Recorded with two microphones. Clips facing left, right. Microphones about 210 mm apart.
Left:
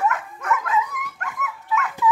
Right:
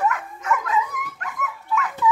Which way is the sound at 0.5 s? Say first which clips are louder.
Even; centre (ahead or behind).